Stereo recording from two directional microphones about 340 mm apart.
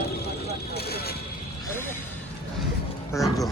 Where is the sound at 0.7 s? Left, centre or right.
Left.